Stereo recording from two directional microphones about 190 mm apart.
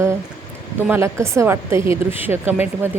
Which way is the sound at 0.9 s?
15° right (ahead or behind).